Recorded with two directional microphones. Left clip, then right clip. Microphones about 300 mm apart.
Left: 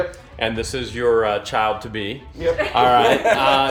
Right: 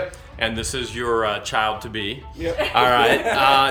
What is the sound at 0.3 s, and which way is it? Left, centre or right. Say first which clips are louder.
A man's voice: left 1 dB; centre.